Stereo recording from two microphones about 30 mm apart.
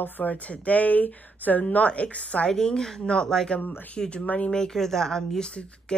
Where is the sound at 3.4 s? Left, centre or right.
Left.